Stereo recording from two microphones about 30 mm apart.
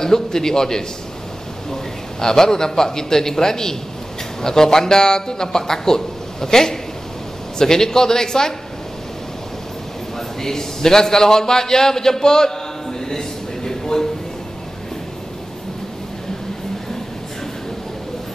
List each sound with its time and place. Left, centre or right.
0.0 s a man's voice: centre
10.1 s a man's voice: centre
13.7 s a sound: centre